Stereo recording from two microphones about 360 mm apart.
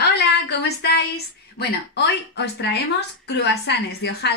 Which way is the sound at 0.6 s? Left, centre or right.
Left.